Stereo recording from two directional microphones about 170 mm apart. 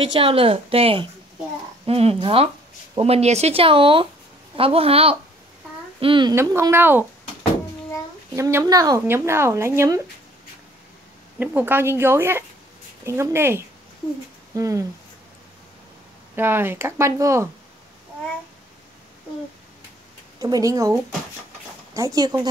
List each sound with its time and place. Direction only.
0.0 s a child's voice: 30° right (ahead or behind)
6.3 s speech: 15° right (ahead or behind)
8.4 s speech: 15° right (ahead or behind)
11.3 s speech: 10° right (ahead or behind)
16.3 s speech: 15° right (ahead or behind)
20.3 s speech: 20° right (ahead or behind)